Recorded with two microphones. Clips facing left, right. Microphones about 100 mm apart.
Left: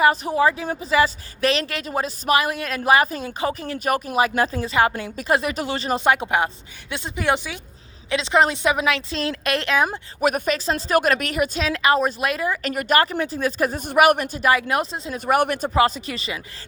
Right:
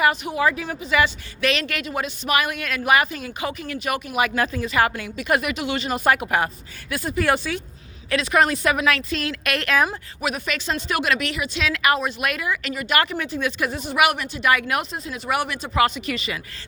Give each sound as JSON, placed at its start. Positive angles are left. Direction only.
{"t": 0.0, "sound": "a woman's voice", "side_deg": 35}
{"t": 10.2, "sound": "a woman's voice", "side_deg": 45}
{"t": 14.4, "sound": "a woman's voice", "side_deg": 30}
{"t": 15.3, "sound": "speech", "side_deg": 50}
{"t": 15.7, "sound": "a woman's voice", "side_deg": 30}